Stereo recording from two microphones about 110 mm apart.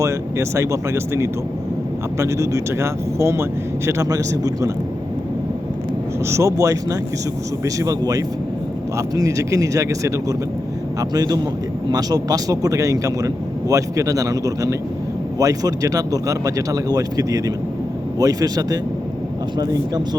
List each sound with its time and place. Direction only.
0.0 s speech: 25° right (ahead or behind)
6.2 s speech: 25° right (ahead or behind)